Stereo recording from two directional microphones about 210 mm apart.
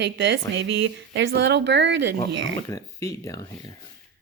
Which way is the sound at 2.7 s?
15° left (ahead or behind).